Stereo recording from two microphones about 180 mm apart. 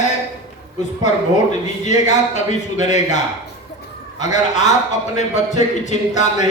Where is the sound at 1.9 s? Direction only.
40° left (ahead or behind).